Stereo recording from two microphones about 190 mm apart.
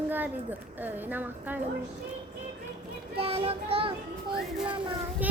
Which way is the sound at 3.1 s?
30° right (ahead or behind).